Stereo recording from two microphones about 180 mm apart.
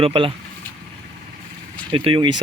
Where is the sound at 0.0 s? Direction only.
30° right (ahead or behind).